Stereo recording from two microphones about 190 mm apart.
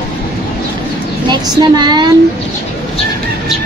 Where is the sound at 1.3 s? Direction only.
20° right (ahead or behind).